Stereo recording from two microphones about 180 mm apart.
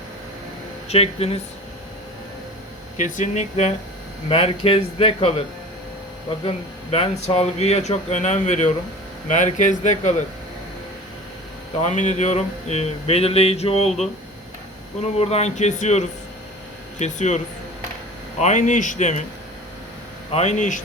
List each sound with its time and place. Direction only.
0.9 s speech: 35° left (ahead or behind)
3.0 s speech: 40° left (ahead or behind)
6.9 s a man's voice: 35° left (ahead or behind)
11.8 s speech: 40° left (ahead or behind)
15.0 s speech: 35° left (ahead or behind)
20.3 s a man's voice: 40° left (ahead or behind)